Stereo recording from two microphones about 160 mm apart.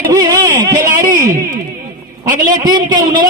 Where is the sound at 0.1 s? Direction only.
20° right (ahead or behind).